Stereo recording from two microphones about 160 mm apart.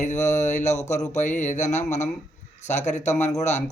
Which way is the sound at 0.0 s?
45° left (ahead or behind).